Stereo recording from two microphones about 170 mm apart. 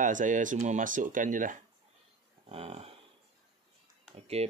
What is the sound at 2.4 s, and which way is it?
Speech, 35° right (ahead or behind).